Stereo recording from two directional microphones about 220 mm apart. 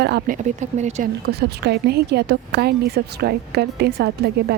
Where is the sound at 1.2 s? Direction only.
45° right (ahead or behind).